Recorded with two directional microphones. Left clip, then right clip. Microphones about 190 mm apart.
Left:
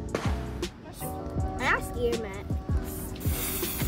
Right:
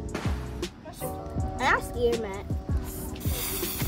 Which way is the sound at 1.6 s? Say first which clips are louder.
Right 3 dB; 5° right (ahead or behind).